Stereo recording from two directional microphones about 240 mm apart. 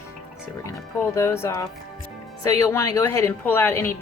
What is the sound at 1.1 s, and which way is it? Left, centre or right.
A woman's voice, centre.